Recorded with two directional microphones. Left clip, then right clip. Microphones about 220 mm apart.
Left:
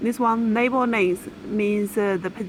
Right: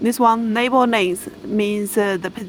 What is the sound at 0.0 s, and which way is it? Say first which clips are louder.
Speech: right 6 dB; 30° right (ahead or behind).